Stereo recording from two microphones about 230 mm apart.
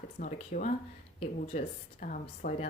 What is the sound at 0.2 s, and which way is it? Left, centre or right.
Speech, left.